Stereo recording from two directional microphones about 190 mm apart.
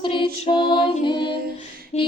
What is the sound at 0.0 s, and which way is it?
Music, 25° left (ahead or behind).